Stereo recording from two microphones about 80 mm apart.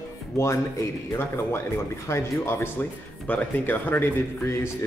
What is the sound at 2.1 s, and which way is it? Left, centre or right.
Speech, left.